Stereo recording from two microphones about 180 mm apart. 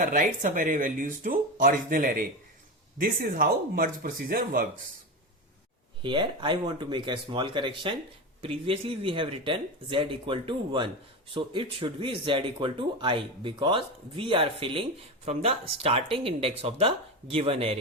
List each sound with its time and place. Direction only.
0.0 s speech: 45° right (ahead or behind)
6.0 s speech: 25° right (ahead or behind)